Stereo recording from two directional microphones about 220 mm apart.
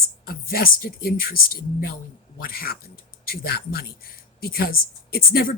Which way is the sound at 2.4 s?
45° left (ahead or behind).